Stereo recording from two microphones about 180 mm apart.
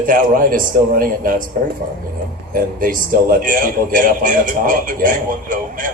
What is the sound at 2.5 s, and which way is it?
Speech, 50° right (ahead or behind).